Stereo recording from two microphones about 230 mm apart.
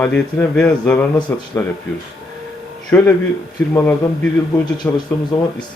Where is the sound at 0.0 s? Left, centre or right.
Centre.